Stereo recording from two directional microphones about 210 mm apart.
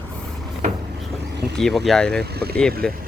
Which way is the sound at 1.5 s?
Centre (ahead or behind).